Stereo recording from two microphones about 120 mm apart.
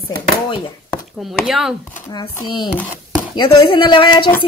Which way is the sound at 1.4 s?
5° right (ahead or behind).